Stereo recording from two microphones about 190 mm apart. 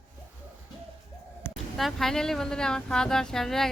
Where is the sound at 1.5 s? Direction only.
Centre (ahead or behind).